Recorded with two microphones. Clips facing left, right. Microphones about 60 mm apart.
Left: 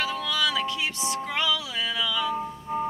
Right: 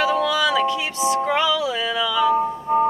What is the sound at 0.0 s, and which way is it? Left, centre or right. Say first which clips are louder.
Music: right 8 dB; centre.